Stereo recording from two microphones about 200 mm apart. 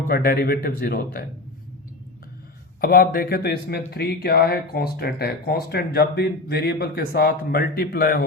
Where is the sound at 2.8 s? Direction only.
50° left (ahead or behind).